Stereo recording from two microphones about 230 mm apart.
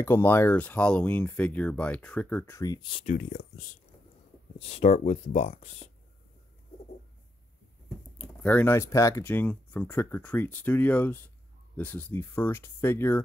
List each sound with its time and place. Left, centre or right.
0.0 s speech: centre
3.2 s speech: left
4.6 s speech: left
8.2 s speech: centre